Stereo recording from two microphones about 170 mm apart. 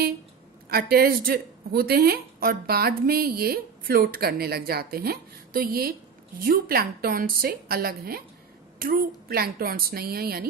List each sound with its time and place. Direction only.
0.7 s a woman's voice: 65° right (ahead or behind)